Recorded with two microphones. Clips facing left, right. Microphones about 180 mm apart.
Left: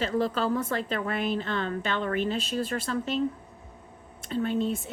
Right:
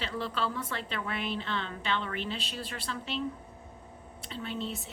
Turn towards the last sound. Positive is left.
turn(degrees=45)  # may be behind; listen again after turning